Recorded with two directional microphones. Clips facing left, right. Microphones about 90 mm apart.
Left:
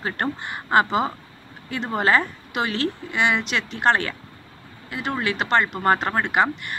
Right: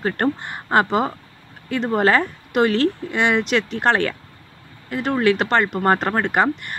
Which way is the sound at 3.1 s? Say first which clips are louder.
Right 3 dB; 5° left (ahead or behind).